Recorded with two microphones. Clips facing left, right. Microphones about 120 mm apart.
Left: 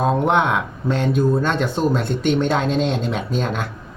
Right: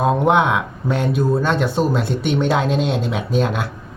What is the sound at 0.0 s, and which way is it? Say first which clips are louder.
A man's voice: right 2 dB; 5° right (ahead or behind).